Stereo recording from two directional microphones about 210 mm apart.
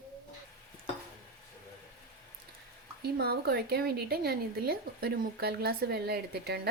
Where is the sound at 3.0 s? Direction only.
50° right (ahead or behind).